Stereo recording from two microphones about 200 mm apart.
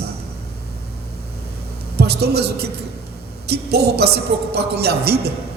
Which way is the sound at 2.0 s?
55° right (ahead or behind).